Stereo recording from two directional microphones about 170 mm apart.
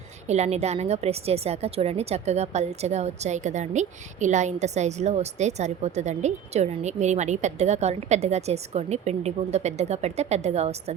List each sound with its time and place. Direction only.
0.3 s a woman's voice: 40° right (ahead or behind)